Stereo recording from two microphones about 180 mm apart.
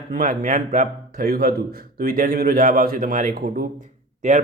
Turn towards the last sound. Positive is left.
turn(degrees=-40)  # may be behind; listen again after turning